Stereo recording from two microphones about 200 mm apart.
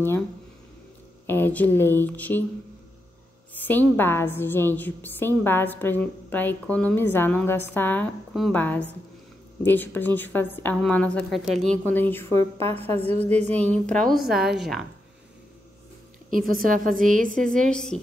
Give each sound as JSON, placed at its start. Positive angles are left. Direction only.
{"t": 1.2, "sound": "a woman's voice", "side_deg": 10}
{"t": 3.5, "sound": "a woman's voice", "side_deg": 10}
{"t": 12.5, "sound": "a woman's voice", "side_deg": -30}
{"t": 13.8, "sound": "a woman's voice", "side_deg": 5}
{"t": 16.3, "sound": "a woman's voice", "side_deg": -45}
{"t": 17.6, "sound": "a woman's voice", "side_deg": 5}